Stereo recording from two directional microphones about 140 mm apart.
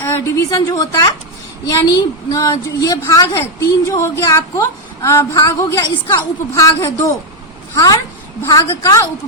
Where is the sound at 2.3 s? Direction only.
25° left (ahead or behind).